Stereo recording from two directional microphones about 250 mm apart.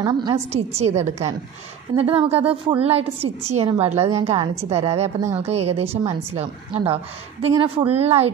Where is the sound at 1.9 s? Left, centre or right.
Right.